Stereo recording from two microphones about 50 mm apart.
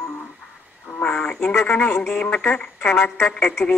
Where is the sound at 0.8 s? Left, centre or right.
Left.